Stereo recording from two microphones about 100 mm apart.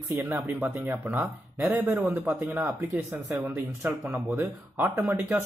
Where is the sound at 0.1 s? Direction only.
20° right (ahead or behind).